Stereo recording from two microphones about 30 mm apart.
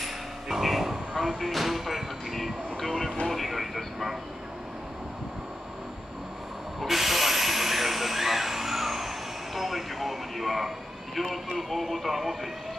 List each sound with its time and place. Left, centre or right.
0.5 s vehicle: centre
1.1 s music: centre
3.3 s speech: centre
6.8 s a sound: centre
11.1 s speech: centre